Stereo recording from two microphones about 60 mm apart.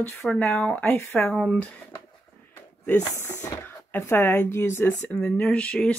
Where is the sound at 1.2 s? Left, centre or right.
Left.